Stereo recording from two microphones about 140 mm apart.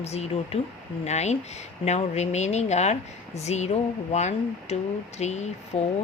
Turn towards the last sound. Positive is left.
turn(degrees=50)  # may be behind; listen again after turning